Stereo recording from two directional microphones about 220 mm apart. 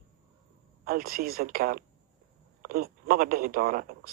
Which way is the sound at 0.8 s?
40° right (ahead or behind).